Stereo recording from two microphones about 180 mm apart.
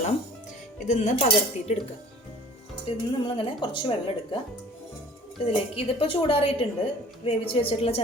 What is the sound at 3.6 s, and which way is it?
Speech, 25° left (ahead or behind).